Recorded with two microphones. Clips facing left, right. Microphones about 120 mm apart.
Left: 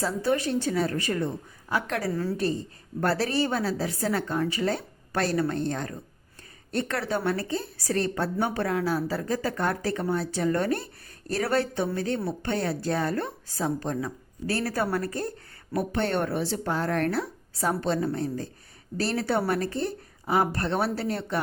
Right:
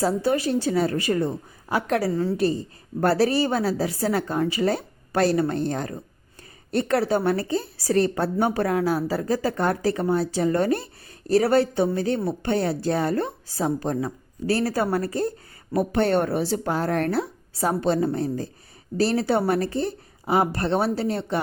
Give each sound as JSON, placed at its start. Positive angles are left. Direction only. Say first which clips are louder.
{"t": 0.0, "sound": "a woman's voice", "louder": "right 4 dB", "side_deg": -35}
{"t": 3.0, "sound": "a woman's voice", "louder": "right 5 dB", "side_deg": -35}
{"t": 15.7, "sound": "a woman's voice", "louder": "right 6 dB", "side_deg": -40}